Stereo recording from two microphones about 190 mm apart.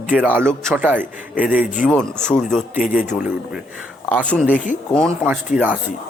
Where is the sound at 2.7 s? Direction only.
45° left (ahead or behind).